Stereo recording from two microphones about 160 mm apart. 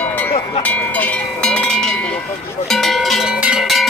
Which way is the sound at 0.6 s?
10° left (ahead or behind).